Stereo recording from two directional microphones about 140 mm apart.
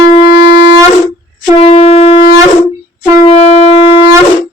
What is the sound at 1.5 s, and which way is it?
Wind instrument, 50° left (ahead or behind).